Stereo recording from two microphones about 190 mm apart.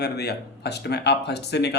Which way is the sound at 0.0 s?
60° left (ahead or behind).